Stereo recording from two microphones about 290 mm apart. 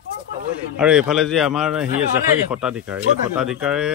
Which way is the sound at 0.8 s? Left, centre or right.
Centre.